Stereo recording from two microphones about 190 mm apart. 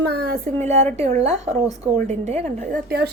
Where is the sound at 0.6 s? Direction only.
35° right (ahead or behind).